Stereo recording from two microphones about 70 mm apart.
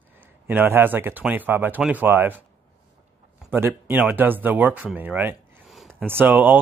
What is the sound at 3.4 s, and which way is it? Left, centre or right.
Speech, right.